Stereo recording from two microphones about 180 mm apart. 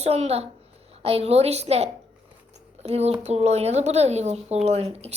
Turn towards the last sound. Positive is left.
turn(degrees=-35)  # may be behind; listen again after turning